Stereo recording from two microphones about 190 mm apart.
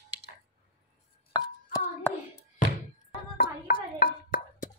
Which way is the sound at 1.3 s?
15° left (ahead or behind).